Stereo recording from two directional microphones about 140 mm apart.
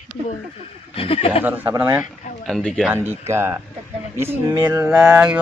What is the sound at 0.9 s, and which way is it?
Speech, 45° left (ahead or behind).